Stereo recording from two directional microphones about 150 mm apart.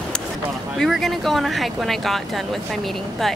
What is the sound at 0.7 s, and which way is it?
Speech, centre (ahead or behind).